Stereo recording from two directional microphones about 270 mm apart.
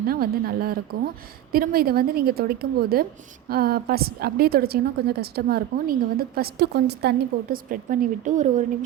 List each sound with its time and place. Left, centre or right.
0.1 s a woman's voice: right